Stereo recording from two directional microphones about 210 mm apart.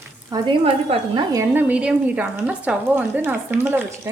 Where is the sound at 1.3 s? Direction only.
10° right (ahead or behind).